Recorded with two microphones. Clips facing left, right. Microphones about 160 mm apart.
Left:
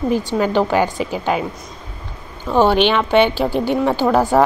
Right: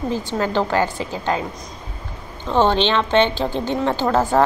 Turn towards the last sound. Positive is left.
turn(degrees=10)  # may be behind; listen again after turning